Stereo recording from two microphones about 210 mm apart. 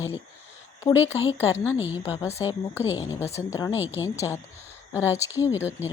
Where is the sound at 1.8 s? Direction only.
10° right (ahead or behind).